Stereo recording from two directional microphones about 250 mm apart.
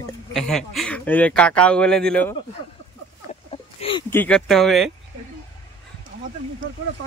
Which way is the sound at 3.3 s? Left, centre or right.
Left.